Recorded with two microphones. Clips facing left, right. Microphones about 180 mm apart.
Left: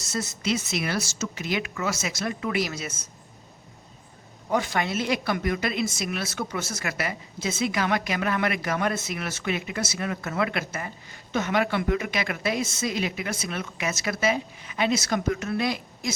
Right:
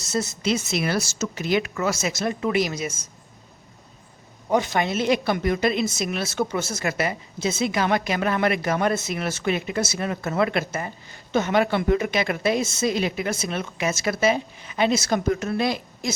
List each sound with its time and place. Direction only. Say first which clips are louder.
0.1 s speech: right 4 dB; 25° right (ahead or behind)
2.1 s speech: right 4 dB; 25° right (ahead or behind)
4.4 s speech: right 4 dB; 20° right (ahead or behind)